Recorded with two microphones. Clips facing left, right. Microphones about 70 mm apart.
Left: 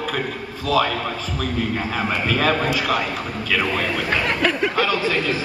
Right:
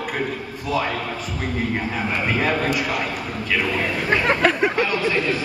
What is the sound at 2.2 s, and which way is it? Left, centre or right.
Speech, left.